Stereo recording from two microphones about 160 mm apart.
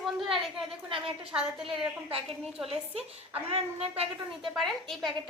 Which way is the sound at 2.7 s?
40° right (ahead or behind).